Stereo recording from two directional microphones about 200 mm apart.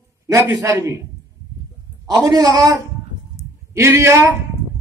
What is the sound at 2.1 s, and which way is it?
A man's voice, 20° right (ahead or behind).